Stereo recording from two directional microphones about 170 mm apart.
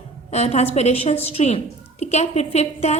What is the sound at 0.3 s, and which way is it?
A woman's voice, 40° left (ahead or behind).